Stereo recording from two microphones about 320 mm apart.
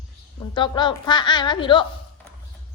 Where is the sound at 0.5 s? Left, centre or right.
Centre.